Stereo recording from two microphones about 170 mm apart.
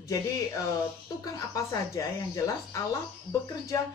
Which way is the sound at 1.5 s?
20° left (ahead or behind).